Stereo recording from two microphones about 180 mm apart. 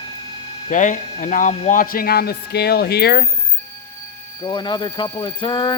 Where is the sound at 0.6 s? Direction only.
45° left (ahead or behind); by 3.2 s 60° left (ahead or behind).